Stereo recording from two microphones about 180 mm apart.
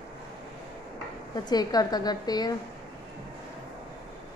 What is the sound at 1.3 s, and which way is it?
A woman's voice, 20° left (ahead or behind).